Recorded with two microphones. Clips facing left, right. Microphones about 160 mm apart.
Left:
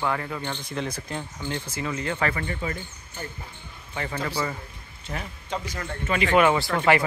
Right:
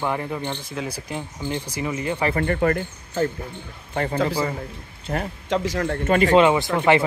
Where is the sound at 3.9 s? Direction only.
35° right (ahead or behind).